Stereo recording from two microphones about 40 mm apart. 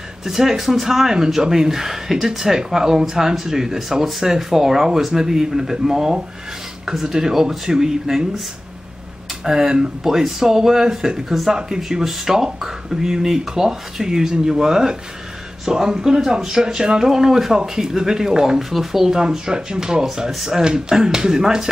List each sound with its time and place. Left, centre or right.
0.2 s speech: centre
9.4 s speech: centre
18.6 s speech: centre
20.2 s speech: centre
20.5 s speech: centre